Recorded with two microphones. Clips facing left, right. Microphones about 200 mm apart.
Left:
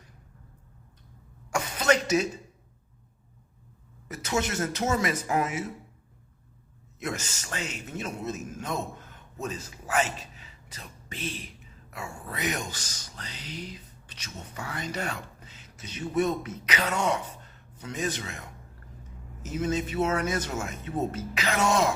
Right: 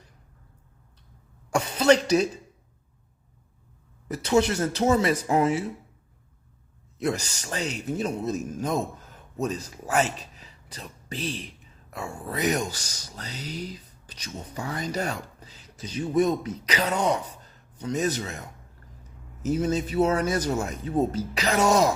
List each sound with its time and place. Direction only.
1.5 s cough: 30° right (ahead or behind)
4.1 s speech: 35° right (ahead or behind)
7.0 s a man's voice: 35° right (ahead or behind)
19.5 s speech: 35° right (ahead or behind)